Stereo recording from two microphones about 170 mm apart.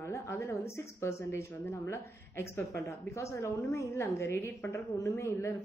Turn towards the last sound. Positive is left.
turn(degrees=15)  # may be behind; listen again after turning